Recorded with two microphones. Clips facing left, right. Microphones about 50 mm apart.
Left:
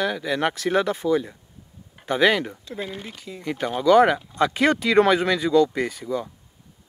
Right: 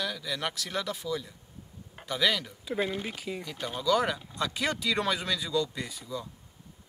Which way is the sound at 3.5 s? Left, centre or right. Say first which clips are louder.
Left 10 dB; left.